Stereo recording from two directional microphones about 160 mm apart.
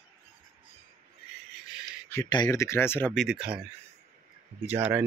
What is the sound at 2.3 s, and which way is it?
Speech, 25° left (ahead or behind).